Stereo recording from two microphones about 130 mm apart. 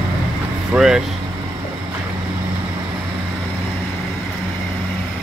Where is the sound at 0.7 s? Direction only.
5° right (ahead or behind).